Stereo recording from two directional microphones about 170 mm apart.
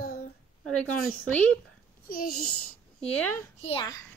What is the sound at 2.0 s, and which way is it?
Speech, 60° left (ahead or behind).